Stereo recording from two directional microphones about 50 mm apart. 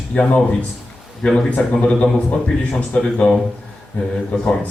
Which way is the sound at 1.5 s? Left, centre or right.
Left.